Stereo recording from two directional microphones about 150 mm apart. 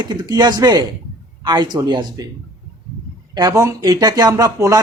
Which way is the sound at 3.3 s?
25° right (ahead or behind).